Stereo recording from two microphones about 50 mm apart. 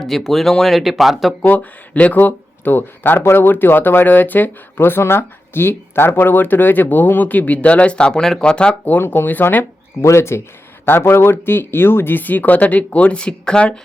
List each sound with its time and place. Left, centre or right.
0.0 s speech: centre
1.4 s speech: left
2.1 s speech: left
4.8 s speech: left; by 8.7 s centre
8.9 s speech: left
10.0 s speech: left; by 13.7 s centre